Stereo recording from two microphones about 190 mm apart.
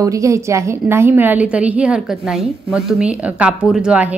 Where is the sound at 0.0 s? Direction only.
15° right (ahead or behind).